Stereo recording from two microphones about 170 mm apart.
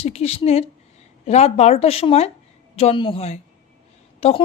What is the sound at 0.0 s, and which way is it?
A woman's voice, 40° left (ahead or behind).